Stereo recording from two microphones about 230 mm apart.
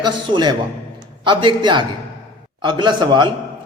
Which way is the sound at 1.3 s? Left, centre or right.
Centre.